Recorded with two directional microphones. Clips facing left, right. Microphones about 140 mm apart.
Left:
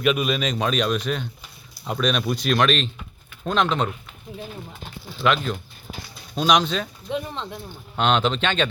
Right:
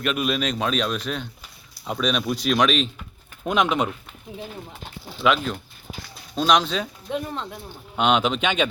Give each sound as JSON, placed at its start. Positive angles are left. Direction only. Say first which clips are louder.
{"t": 0.0, "sound": "speech", "louder": "left 2 dB", "side_deg": 0}
{"t": 5.2, "sound": "speech", "louder": "even", "side_deg": 0}